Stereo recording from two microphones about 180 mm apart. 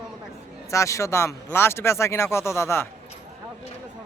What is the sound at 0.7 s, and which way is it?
Speech, 15° left (ahead or behind).